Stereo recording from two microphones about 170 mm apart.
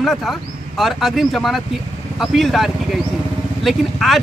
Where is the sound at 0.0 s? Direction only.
Centre (ahead or behind).